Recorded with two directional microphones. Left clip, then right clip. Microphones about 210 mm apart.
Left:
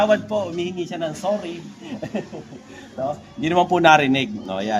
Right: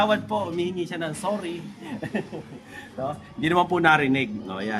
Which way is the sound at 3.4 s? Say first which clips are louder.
Left 4 dB; 5° left (ahead or behind).